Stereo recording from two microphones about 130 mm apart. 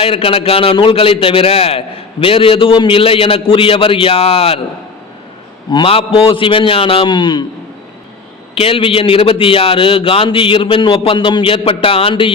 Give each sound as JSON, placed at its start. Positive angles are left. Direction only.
{"t": 0.0, "sound": "a man's voice", "side_deg": 45}
{"t": 5.7, "sound": "a man's voice", "side_deg": 45}
{"t": 8.5, "sound": "a man's voice", "side_deg": 45}